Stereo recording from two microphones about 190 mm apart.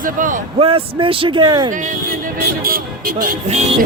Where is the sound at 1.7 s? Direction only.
40° right (ahead or behind).